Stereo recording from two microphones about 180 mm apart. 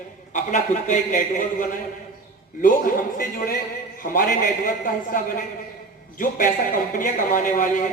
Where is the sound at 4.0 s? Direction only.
50° left (ahead or behind).